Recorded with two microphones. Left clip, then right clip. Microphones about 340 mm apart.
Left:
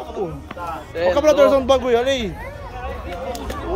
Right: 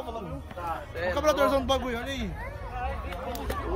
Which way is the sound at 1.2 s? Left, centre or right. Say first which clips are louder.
Left 10 dB; centre.